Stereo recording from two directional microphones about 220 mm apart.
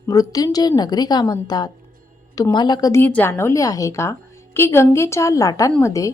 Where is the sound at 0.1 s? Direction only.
15° left (ahead or behind).